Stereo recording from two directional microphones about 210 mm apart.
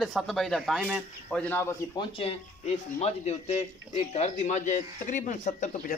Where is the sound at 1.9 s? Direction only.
25° left (ahead or behind).